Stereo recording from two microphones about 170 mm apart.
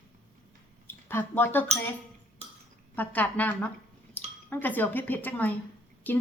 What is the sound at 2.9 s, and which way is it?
A woman's voice, 10° left (ahead or behind).